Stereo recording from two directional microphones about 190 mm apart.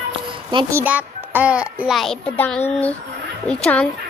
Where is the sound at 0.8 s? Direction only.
10° right (ahead or behind); by 2.6 s 5° left (ahead or behind).